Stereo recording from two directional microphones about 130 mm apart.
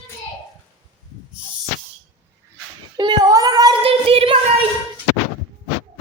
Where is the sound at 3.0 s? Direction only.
30° right (ahead or behind).